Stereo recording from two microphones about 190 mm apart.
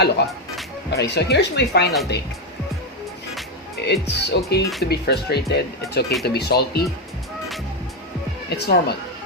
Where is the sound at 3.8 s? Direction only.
60° left (ahead or behind).